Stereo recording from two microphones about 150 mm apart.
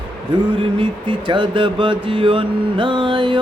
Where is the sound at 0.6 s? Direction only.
35° right (ahead or behind).